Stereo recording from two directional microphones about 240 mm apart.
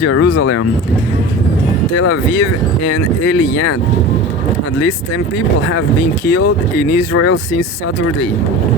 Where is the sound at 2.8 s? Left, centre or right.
Left.